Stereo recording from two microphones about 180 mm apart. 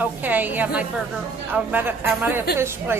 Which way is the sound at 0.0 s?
10° right (ahead or behind).